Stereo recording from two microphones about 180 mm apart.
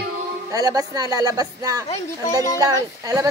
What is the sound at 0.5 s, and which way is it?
Speech, 20° right (ahead or behind).